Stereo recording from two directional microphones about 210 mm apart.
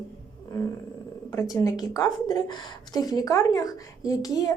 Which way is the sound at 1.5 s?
15° left (ahead or behind).